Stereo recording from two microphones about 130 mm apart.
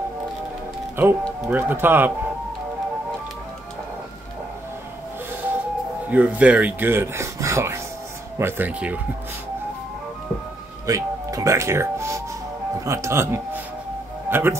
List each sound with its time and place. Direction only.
0.9 s speech: 15° right (ahead or behind)
6.0 s speech: 10° right (ahead or behind)
10.9 s speech: 25° right (ahead or behind)